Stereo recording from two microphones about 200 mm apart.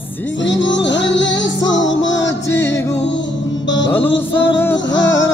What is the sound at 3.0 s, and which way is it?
Music, 65° left (ahead or behind).